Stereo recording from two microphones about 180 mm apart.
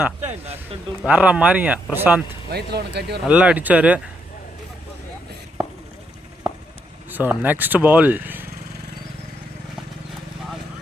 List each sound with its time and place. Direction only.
0.0 s speech: 10° right (ahead or behind)
2.5 s speech: 65° right (ahead or behind)
3.2 s speech: 5° right (ahead or behind)
7.1 s speech: 10° right (ahead or behind)